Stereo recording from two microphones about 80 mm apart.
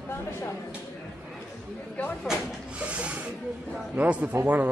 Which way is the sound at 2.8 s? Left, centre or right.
Centre.